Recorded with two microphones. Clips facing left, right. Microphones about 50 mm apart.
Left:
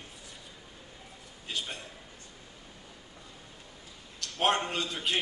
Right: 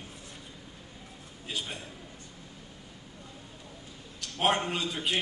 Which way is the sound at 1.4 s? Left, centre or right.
Centre.